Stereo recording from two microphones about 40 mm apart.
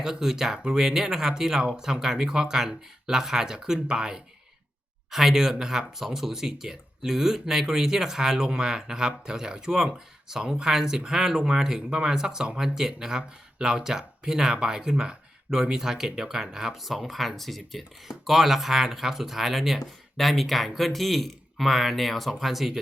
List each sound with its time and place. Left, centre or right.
0.0 s speech: centre
16.8 s speech: centre